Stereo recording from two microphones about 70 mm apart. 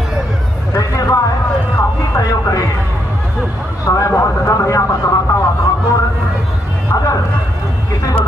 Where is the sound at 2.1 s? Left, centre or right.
Left.